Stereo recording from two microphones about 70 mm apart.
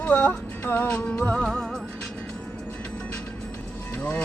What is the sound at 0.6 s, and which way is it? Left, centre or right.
Speech, left.